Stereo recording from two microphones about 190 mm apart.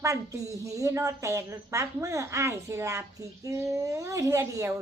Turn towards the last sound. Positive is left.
turn(degrees=-15)  # may be behind; listen again after turning